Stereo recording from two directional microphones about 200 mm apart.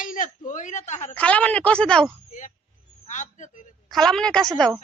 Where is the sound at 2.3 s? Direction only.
35° left (ahead or behind).